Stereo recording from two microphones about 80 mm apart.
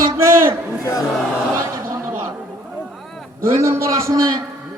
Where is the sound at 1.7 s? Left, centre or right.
Right.